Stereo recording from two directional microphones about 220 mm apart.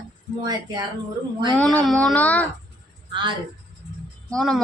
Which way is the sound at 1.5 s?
5° left (ahead or behind).